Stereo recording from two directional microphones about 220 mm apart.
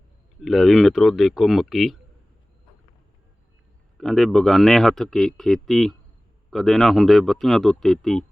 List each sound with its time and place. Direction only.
0.4 s a man's voice: centre (ahead or behind)
3.9 s a man's voice: centre (ahead or behind)